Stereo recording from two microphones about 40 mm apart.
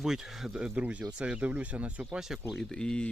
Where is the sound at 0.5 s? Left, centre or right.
Right.